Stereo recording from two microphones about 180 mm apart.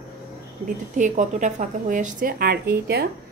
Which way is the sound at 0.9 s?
45° right (ahead or behind).